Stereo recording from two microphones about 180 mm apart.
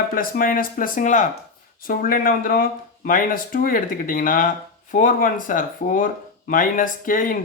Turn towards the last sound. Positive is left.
turn(degrees=50)  # may be behind; listen again after turning